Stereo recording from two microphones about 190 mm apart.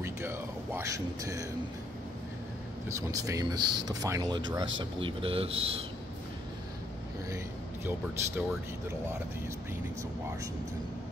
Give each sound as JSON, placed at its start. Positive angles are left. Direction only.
{"t": 0.0, "sound": "speech", "side_deg": -15}
{"t": 2.9, "sound": "speech", "side_deg": -15}
{"t": 7.2, "sound": "speech", "side_deg": -15}